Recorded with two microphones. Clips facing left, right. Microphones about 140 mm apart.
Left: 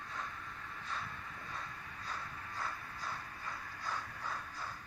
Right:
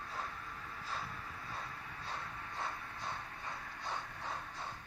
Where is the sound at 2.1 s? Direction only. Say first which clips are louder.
Even; 25° right (ahead or behind).